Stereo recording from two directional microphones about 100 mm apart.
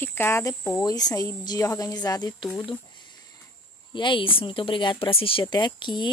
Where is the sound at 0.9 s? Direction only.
35° left (ahead or behind).